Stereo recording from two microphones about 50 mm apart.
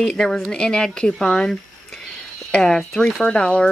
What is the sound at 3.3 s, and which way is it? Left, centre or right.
Speech, left.